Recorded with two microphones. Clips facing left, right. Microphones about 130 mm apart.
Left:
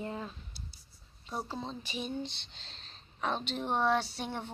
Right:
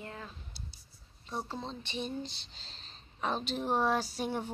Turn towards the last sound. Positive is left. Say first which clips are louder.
# right 3 dB
turn(degrees=-5)  # may be behind; listen again after turning